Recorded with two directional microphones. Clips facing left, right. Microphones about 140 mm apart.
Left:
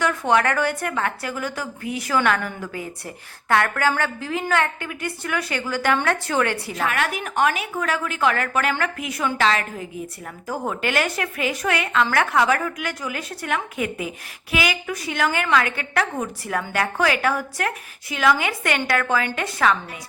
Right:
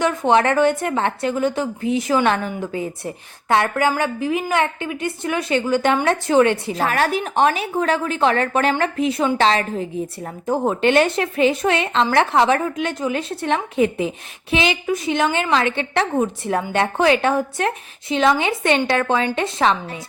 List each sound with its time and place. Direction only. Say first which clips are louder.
0.0 s a woman's voice: right 3 dB; 20° right (ahead or behind)
6.8 s a woman's voice: right 5 dB; 35° right (ahead or behind)